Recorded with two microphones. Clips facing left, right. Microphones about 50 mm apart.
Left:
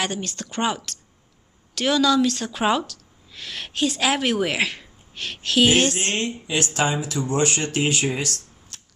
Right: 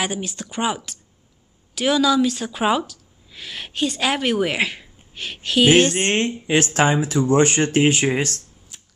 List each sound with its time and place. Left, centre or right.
0.0 s speech: centre
6.1 s speech: right
8.7 s shuffling cards: centre